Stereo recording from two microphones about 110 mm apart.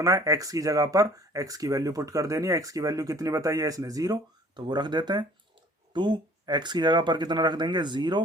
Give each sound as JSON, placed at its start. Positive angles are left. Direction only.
{"t": 0.0, "sound": "speech", "side_deg": -30}